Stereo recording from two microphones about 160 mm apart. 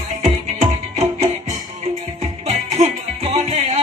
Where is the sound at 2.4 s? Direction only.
45° right (ahead or behind).